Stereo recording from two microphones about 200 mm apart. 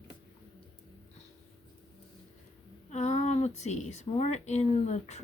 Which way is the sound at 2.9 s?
35° left (ahead or behind).